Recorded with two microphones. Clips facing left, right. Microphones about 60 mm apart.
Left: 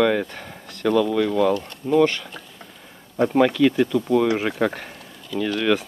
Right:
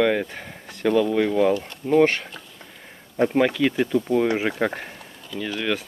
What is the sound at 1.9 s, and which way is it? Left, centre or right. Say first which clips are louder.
Speech: even; right.